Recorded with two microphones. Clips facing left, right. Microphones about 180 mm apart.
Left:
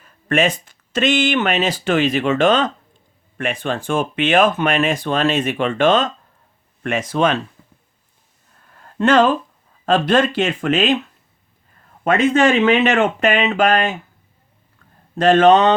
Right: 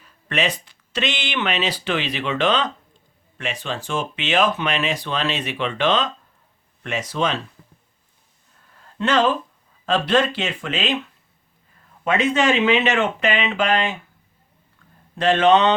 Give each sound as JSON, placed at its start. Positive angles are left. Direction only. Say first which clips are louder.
{"t": 0.0, "sound": "speech", "louder": "left 6 dB", "side_deg": 50}
{"t": 9.0, "sound": "speech", "louder": "left 5 dB", "side_deg": 50}
{"t": 12.0, "sound": "speech", "louder": "left 4 dB", "side_deg": 50}
{"t": 15.1, "sound": "speech", "louder": "left 4 dB", "side_deg": 45}